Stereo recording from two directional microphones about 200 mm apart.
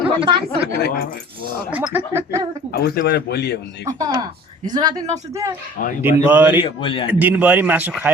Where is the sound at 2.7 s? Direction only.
50° left (ahead or behind).